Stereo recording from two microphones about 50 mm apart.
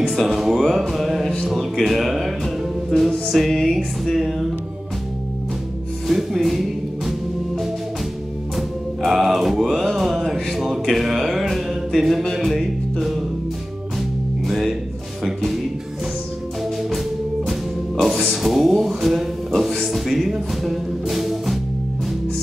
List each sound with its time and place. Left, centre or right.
0.1 s speech: centre
0.7 s music: centre
1.4 s speech: centre
6.0 s music: centre
14.5 s music: centre
18.0 s a sound: centre